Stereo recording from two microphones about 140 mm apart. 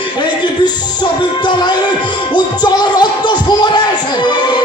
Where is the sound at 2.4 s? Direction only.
30° left (ahead or behind).